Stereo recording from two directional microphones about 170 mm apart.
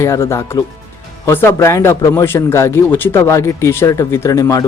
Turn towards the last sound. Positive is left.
turn(degrees=20)  # may be behind; listen again after turning